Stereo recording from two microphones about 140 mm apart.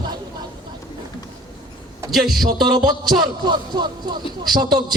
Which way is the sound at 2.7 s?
30° right (ahead or behind).